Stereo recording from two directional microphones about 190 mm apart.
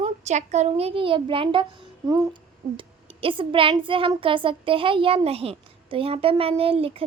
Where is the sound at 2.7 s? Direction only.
30° right (ahead or behind).